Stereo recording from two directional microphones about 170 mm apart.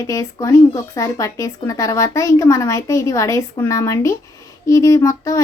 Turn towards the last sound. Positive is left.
turn(degrees=20)  # may be behind; listen again after turning